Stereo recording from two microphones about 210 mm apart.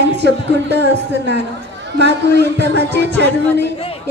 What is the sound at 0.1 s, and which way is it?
Speech, 55° right (ahead or behind).